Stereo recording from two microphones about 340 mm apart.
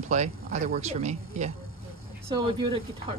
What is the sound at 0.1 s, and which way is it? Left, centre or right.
Speech, right.